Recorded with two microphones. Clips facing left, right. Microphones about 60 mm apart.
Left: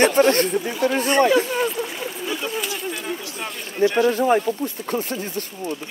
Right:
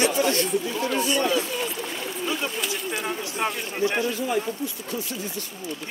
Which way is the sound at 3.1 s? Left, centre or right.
Right.